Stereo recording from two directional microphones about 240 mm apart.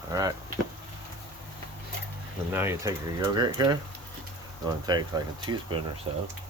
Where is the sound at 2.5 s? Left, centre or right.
Centre.